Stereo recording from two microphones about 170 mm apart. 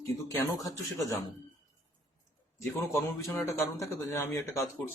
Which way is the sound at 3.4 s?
15° left (ahead or behind).